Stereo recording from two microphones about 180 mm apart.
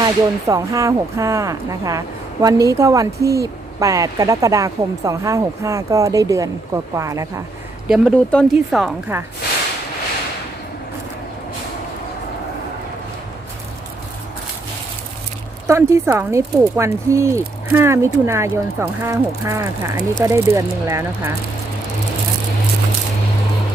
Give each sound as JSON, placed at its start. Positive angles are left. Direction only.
{"t": 0.0, "sound": "speech", "side_deg": -20}
{"t": 7.9, "sound": "speech", "side_deg": -5}
{"t": 15.6, "sound": "speech", "side_deg": -15}